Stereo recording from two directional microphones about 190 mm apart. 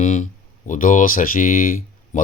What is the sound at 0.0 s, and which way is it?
Speech, 40° left (ahead or behind).